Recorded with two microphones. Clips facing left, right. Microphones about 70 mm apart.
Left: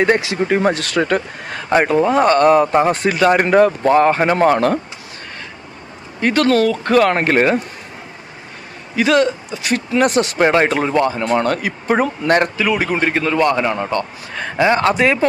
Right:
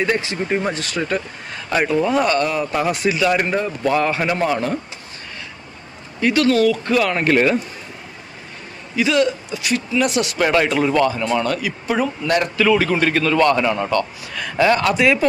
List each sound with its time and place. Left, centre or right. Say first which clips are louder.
0.3 s speech: left 5 dB; left
1.7 s speech: left 4 dB; left
3.4 s speech: left 10 dB; left
3.8 s speech: left 6 dB; left
6.1 s speech: left 2 dB; left
9.0 s a man's voice: left 3 dB; left
11.2 s speech: left 3 dB; left
12.5 s a man's voice: right 1 dB; centre; by 15.3 s left